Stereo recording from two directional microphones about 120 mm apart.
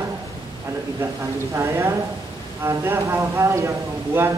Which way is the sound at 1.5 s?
25° right (ahead or behind).